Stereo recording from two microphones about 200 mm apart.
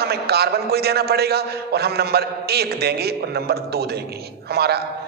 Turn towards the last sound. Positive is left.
turn(degrees=-55)  # may be behind; listen again after turning